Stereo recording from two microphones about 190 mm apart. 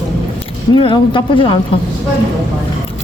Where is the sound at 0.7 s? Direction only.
25° left (ahead or behind).